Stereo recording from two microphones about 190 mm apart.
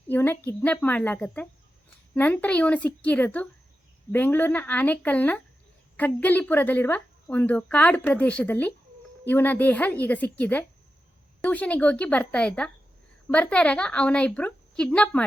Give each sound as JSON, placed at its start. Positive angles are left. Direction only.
{"t": 0.1, "sound": "a woman's voice", "side_deg": 10}